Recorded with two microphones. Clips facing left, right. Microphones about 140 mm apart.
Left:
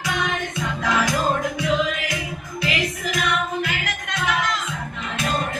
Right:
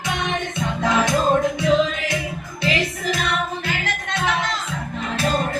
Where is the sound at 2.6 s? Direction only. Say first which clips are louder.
Right 3 dB; 30° right (ahead or behind).